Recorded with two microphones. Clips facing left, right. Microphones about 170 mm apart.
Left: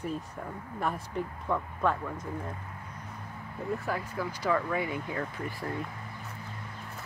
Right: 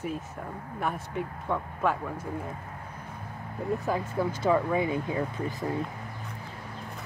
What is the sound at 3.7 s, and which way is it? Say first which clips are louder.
Speech: right 7 dB; 20° right (ahead or behind).